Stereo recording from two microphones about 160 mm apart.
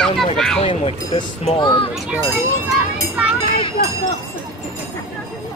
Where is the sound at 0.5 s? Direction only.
35° left (ahead or behind).